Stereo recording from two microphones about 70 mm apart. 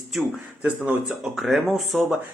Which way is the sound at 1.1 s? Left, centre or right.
Centre.